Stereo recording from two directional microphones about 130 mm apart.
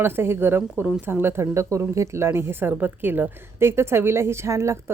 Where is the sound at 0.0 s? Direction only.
15° right (ahead or behind).